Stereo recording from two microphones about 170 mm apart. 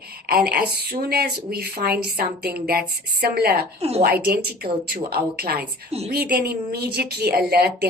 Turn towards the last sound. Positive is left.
turn(degrees=-65)  # may be behind; listen again after turning